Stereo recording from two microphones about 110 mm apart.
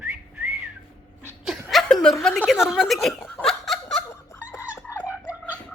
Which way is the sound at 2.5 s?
5° right (ahead or behind).